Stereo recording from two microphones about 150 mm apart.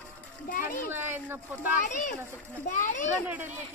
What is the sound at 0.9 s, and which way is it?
Speech, 15° right (ahead or behind).